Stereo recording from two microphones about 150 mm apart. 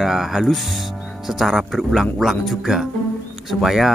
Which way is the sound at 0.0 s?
Centre (ahead or behind).